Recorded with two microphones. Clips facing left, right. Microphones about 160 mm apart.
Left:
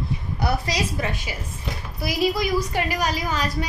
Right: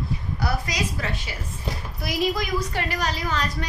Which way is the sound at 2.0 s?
5° left (ahead or behind).